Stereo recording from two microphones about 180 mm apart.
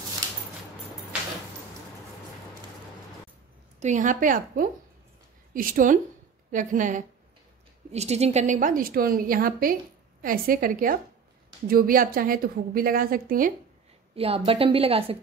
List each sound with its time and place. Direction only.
3.8 s a woman's voice: 45° right (ahead or behind)
14.1 s a woman's voice: 30° right (ahead or behind)